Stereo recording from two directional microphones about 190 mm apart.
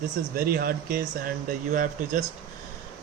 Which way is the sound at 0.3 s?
50° right (ahead or behind).